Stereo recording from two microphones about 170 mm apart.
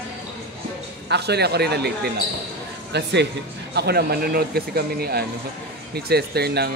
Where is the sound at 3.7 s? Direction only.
75° right (ahead or behind).